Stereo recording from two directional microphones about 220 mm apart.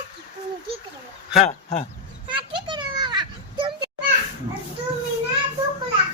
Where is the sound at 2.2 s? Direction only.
20° right (ahead or behind).